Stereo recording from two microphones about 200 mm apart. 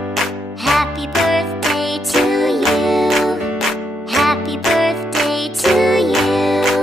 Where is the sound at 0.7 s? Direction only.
Centre (ahead or behind).